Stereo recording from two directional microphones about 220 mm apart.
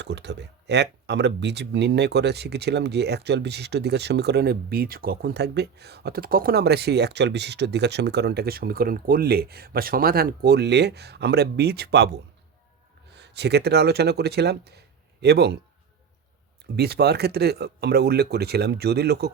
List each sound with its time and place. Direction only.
0.0 s speech: 50° right (ahead or behind)
16.7 s speech: 45° right (ahead or behind)